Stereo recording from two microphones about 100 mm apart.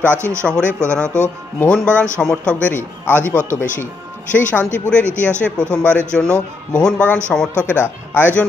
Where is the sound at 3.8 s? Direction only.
15° left (ahead or behind).